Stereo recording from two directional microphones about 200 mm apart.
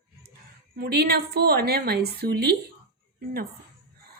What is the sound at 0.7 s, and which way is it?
A woman's voice, 50° right (ahead or behind).